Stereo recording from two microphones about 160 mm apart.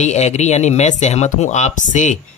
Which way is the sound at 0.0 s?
45° left (ahead or behind).